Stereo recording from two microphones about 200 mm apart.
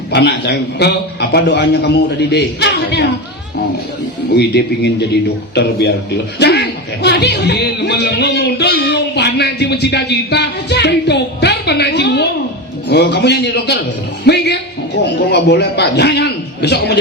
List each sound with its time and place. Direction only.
0.1 s a man's voice: 55° left (ahead or behind)
4.4 s a man's voice: 55° left (ahead or behind)